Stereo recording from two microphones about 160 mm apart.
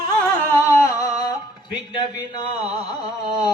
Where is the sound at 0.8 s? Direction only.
25° left (ahead or behind).